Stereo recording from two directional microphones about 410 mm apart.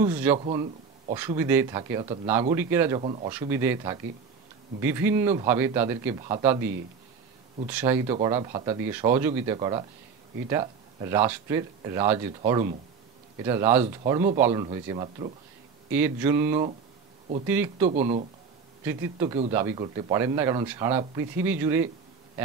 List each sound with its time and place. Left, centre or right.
0.0 s speech: centre
17.8 s speech: centre